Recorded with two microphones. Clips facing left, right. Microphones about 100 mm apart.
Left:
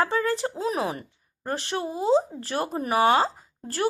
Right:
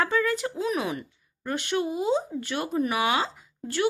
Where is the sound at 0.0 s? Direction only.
35° left (ahead or behind).